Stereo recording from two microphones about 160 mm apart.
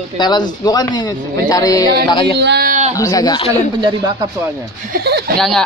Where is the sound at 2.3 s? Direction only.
85° right.